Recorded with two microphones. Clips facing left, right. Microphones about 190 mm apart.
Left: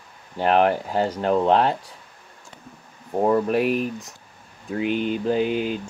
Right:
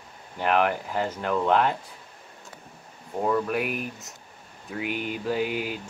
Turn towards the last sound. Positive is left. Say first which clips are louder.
# left 5 dB
turn(degrees=25)  # may be behind; listen again after turning